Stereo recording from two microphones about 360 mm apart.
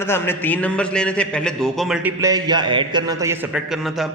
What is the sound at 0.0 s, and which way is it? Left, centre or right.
A man's voice, centre.